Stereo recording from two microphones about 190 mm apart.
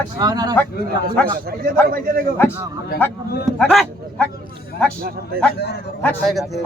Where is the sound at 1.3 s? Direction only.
50° right (ahead or behind).